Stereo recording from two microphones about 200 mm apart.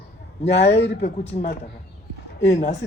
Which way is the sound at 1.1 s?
40° left (ahead or behind).